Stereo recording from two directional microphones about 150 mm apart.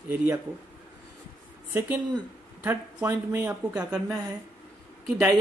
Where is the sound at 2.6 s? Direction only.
15° right (ahead or behind).